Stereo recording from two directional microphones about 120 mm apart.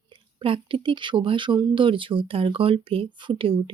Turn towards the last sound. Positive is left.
turn(degrees=-50)  # may be behind; listen again after turning